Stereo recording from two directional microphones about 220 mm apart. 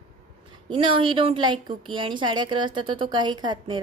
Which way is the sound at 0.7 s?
20° right (ahead or behind).